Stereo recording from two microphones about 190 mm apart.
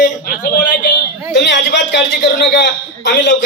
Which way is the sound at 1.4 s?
65° left (ahead or behind).